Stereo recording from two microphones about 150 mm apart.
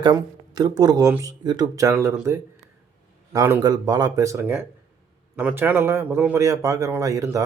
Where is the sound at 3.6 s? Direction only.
25° right (ahead or behind).